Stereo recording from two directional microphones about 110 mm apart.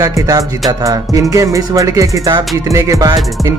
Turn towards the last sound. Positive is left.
turn(degrees=-35)  # may be behind; listen again after turning